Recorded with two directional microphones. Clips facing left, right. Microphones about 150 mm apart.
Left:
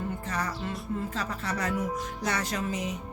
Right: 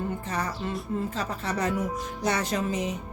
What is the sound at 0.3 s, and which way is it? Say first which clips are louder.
Music: even; 25° right (ahead or behind).